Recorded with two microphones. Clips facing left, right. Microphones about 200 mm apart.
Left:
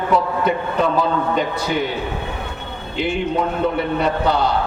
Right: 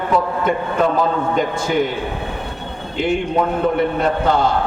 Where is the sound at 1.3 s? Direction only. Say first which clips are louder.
Right 3 dB; 50° right (ahead or behind).